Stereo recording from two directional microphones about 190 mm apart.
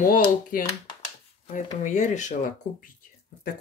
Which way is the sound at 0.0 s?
45° left (ahead or behind).